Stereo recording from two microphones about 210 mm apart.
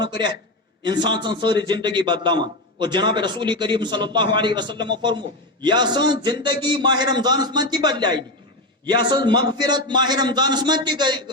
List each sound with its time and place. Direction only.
0.0 s a man's voice: 20° right (ahead or behind)